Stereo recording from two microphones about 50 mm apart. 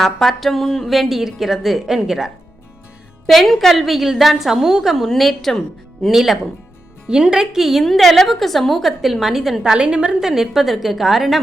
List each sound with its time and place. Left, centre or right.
0.0 s speech: centre
3.2 s speech: centre
5.0 s speech: centre
6.1 s a woman's voice: centre
9.7 s a woman's voice: centre
10.2 s speech: centre